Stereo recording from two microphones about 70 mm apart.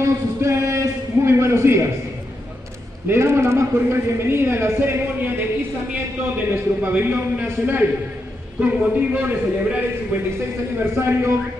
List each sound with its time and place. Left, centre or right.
0.0 s a sound: right
3.1 s a man's voice: right
10.8 s a man's voice: right